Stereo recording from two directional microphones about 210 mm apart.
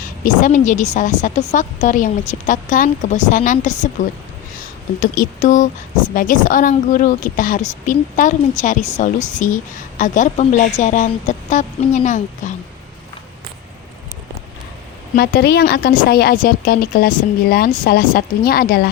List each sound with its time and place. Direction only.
0.0 s a woman's voice: 40° left (ahead or behind)
15.1 s speech: 50° left (ahead or behind)